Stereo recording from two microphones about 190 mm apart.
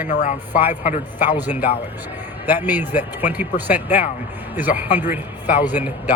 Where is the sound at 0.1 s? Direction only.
40° left (ahead or behind).